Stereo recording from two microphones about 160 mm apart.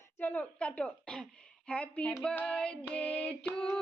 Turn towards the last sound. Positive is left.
turn(degrees=5)  # may be behind; listen again after turning